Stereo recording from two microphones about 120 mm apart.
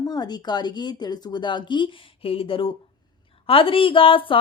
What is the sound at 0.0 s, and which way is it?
A woman's voice, 35° left (ahead or behind).